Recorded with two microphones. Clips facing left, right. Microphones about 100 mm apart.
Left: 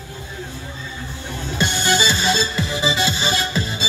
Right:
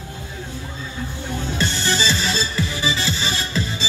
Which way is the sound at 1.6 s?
15° left (ahead or behind).